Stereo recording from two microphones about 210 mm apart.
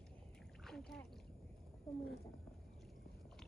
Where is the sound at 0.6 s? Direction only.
Centre (ahead or behind).